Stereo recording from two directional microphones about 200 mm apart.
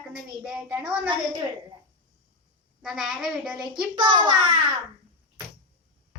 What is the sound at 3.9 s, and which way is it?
Speech, 20° right (ahead or behind).